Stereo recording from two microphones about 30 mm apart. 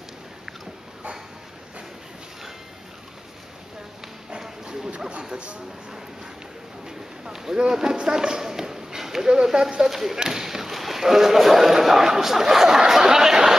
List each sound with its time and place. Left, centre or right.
4.4 s dog: centre
5.3 s speech: right
6.9 s run: centre
9.3 s speech: right
9.8 s a man's voice: centre
10.1 s speech: right
10.4 s a man's voice: centre